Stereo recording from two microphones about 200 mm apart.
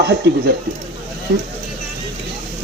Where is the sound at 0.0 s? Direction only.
60° right (ahead or behind).